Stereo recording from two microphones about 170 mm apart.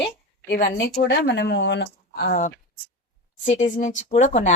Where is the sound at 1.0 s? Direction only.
85° left.